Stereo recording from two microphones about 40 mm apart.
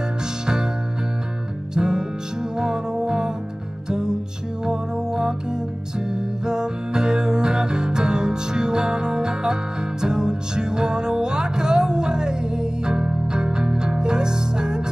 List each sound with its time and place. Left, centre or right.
1.8 s music: centre